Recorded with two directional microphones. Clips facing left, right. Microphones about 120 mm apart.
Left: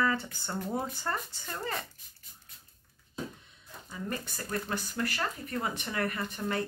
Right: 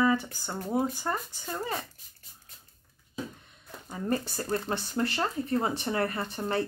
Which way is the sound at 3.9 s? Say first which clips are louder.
Right 7 dB; 35° right (ahead or behind).